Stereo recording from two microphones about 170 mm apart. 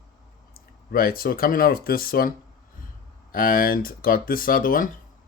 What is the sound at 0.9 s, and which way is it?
Speech, 60° left (ahead or behind).